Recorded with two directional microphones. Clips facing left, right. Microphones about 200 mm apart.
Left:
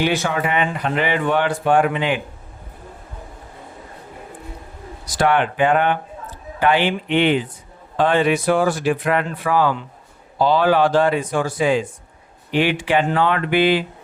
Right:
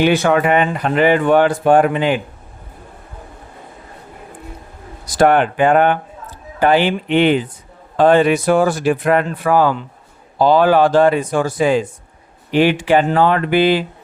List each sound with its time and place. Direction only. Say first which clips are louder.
0.0 s speech: right 6 dB; 60° right (ahead or behind); by 2.2 s 40° right (ahead or behind)
5.0 s speech: right 5 dB; 50° right (ahead or behind)